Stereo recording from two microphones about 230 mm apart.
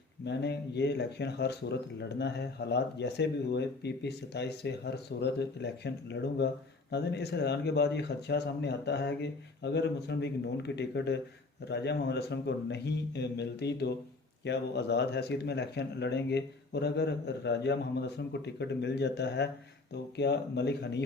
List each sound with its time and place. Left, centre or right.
0.3 s speech: left